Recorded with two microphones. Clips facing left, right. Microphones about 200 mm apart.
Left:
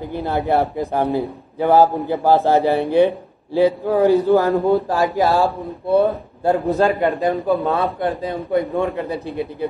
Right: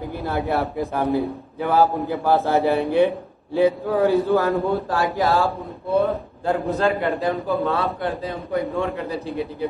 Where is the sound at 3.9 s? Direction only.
15° left (ahead or behind).